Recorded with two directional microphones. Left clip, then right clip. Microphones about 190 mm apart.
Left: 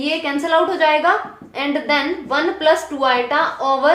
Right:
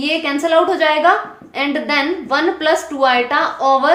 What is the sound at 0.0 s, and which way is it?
A woman's voice, 25° right (ahead or behind).